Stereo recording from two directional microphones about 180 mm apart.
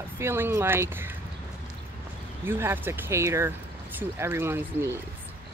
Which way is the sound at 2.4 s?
15° right (ahead or behind).